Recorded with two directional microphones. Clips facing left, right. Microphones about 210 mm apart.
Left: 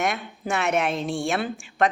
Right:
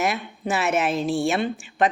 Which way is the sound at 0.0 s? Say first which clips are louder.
Right 2 dB; 5° right (ahead or behind).